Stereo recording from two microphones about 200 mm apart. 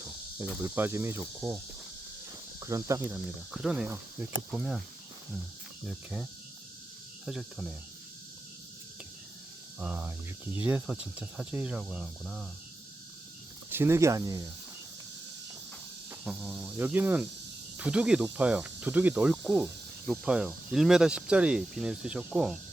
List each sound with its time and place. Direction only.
0.5 s speech: 10° right (ahead or behind)
3.5 s speech: centre (ahead or behind)
5.9 s speech: centre (ahead or behind)
7.3 s speech: centre (ahead or behind)
9.7 s speech: 10° right (ahead or behind)
13.7 s speech: 10° right (ahead or behind)
16.2 s speech: 5° right (ahead or behind)